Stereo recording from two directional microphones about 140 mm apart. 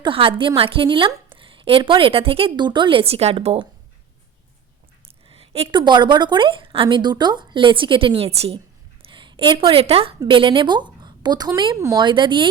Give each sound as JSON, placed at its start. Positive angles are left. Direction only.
{"t": 0.0, "sound": "a woman's voice", "side_deg": -40}
{"t": 5.0, "sound": "a woman's voice", "side_deg": -45}
{"t": 8.5, "sound": "a sound", "side_deg": -35}
{"t": 10.2, "sound": "a woman's voice", "side_deg": -35}